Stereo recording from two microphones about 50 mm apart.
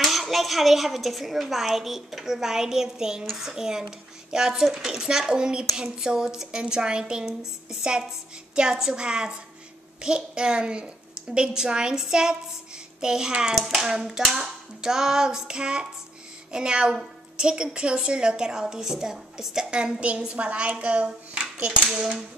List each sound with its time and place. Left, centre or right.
0.0 s a woman's voice: centre
8.5 s a woman's voice: centre